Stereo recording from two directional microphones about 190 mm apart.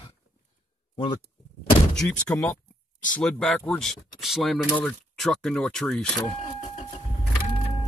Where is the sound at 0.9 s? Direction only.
25° left (ahead or behind).